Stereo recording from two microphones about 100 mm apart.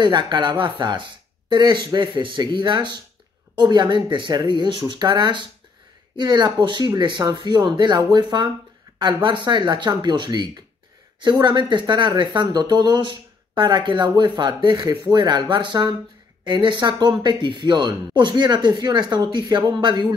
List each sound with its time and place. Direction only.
0.0 s speech: 50° right (ahead or behind)